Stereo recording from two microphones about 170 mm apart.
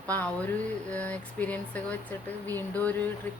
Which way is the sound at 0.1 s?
10° left (ahead or behind).